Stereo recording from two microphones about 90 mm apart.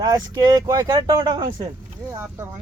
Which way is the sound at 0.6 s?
35° right (ahead or behind).